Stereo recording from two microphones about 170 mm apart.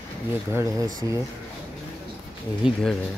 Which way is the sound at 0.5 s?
20° right (ahead or behind).